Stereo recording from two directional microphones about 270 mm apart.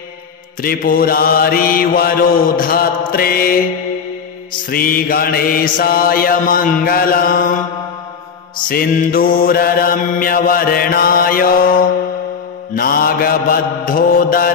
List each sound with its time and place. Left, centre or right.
0.6 s mantra: left
4.6 s mantra: left
8.6 s mantra: left